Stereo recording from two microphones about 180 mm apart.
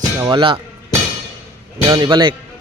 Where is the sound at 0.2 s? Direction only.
25° right (ahead or behind).